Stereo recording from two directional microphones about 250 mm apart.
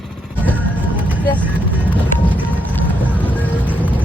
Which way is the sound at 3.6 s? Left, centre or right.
Centre.